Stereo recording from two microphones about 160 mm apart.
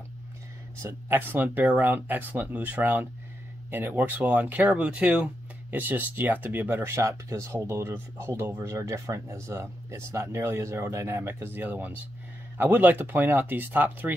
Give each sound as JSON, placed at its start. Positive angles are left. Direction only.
{"t": 0.8, "sound": "speech", "side_deg": -15}